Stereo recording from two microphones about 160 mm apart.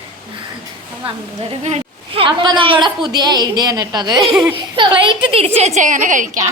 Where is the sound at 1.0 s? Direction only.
40° right (ahead or behind); by 6.4 s 55° right (ahead or behind).